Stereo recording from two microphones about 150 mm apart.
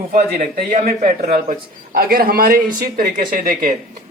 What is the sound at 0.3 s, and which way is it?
A man's voice, 80° right.